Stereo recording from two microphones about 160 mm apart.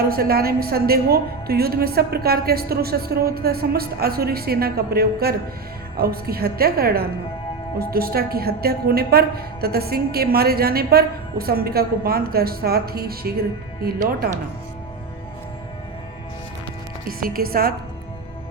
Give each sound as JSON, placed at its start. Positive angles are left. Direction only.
{"t": 0.1, "sound": "a woman's voice", "side_deg": -70}
{"t": 17.1, "sound": "a woman's voice", "side_deg": -65}